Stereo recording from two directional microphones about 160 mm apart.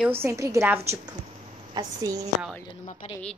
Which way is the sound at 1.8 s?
25° right (ahead or behind).